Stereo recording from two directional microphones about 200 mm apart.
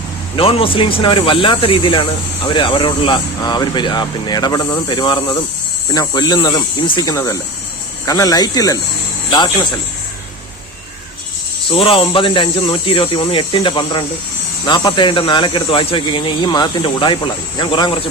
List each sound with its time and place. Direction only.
0.3 s speech: 30° left (ahead or behind)
11.7 s speech: 25° left (ahead or behind)